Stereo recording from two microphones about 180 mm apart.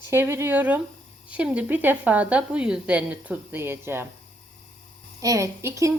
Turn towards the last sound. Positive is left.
turn(degrees=-15)  # may be behind; listen again after turning